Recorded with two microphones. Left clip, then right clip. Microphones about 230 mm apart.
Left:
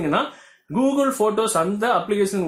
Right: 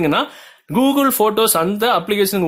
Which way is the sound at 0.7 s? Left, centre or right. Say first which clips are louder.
Right 4 dB; right.